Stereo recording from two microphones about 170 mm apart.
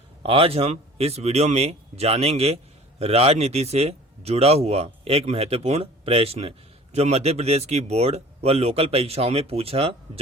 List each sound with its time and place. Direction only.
0.2 s speech: 35° right (ahead or behind)